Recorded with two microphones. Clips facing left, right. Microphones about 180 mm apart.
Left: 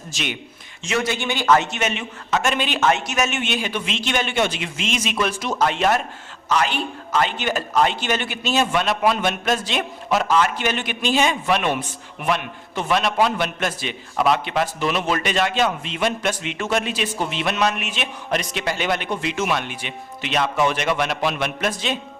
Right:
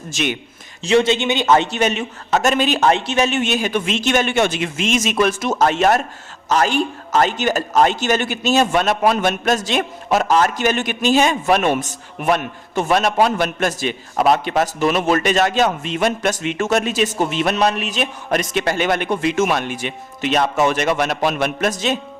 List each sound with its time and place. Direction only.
0.9 s a man's voice: 25° right (ahead or behind); by 21.9 s 45° right (ahead or behind)